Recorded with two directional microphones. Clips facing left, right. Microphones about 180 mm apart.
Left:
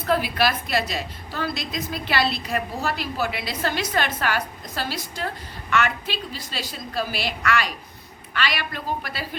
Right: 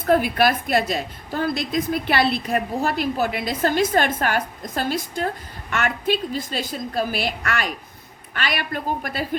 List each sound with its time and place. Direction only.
0.0 s a woman's voice: 50° right (ahead or behind)